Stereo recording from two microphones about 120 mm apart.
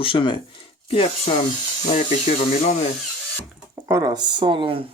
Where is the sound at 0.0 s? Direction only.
45° left (ahead or behind).